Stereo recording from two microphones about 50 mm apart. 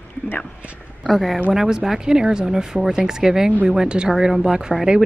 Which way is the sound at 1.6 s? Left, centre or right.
Centre.